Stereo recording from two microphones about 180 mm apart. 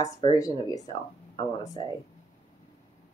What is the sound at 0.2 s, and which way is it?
Speech, 20° left (ahead or behind).